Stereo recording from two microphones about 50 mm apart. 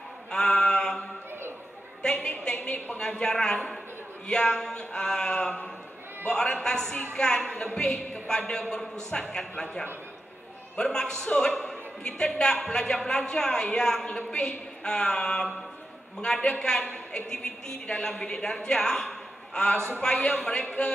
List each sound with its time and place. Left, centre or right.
0.3 s mantra: centre
2.2 s a woman's voice: left